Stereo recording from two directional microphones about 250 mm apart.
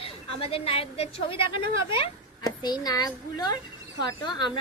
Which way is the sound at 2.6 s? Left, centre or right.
Centre.